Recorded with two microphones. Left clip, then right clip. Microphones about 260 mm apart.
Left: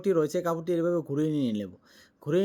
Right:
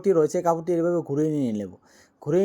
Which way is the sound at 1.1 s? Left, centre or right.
Centre.